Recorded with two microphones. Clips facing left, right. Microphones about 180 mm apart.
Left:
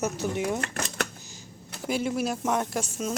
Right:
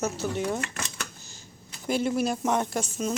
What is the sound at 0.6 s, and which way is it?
Speech, 50° left (ahead or behind).